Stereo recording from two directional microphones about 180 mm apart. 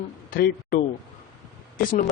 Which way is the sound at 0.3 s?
55° left (ahead or behind).